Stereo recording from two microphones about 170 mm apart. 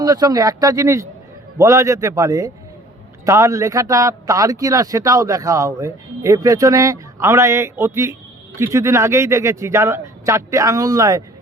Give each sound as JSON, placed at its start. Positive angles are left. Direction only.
{"t": 0.0, "sound": "a man's voice", "side_deg": -25}